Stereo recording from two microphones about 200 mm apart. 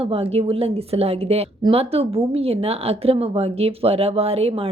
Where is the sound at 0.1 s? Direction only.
30° right (ahead or behind).